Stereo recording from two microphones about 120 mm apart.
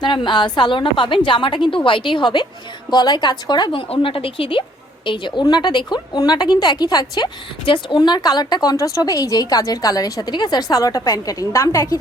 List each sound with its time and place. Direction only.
0.0 s a woman's voice: 40° left (ahead or behind)